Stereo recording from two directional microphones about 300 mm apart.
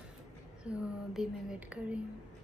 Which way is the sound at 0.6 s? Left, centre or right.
Centre.